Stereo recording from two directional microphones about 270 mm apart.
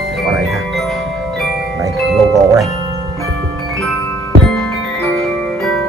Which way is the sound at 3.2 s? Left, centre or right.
Right.